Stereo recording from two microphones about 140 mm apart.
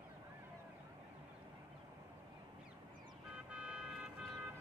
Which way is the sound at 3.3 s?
5° right (ahead or behind).